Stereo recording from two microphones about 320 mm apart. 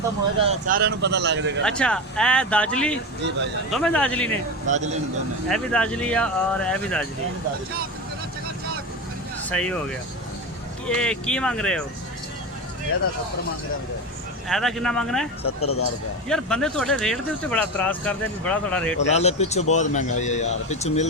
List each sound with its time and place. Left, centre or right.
0.4 s speech: right
1.6 s speech: centre
5.5 s speech: centre
9.5 s speech: centre
10.8 s speech: centre
14.4 s speech: centre
15.4 s speech: left
16.3 s speech: centre
19.1 s speech: centre